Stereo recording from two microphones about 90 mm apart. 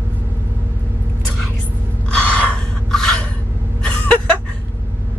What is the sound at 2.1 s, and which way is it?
Gasp, 15° left (ahead or behind).